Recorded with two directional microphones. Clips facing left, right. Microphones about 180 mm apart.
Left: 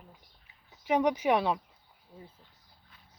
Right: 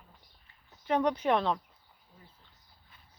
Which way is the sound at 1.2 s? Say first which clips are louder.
Left 1 dB; 10° left (ahead or behind).